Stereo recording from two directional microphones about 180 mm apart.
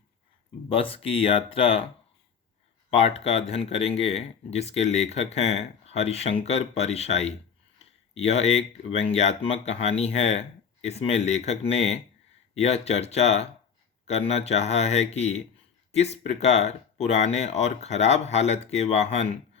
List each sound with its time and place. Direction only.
0.7 s speech: 30° left (ahead or behind)
2.9 s speech: 35° left (ahead or behind)